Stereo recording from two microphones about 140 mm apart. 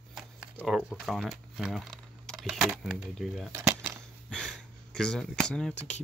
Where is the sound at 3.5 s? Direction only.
20° right (ahead or behind).